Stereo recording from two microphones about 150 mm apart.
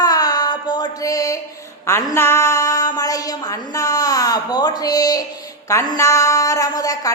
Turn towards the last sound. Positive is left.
turn(degrees=25)  # may be behind; listen again after turning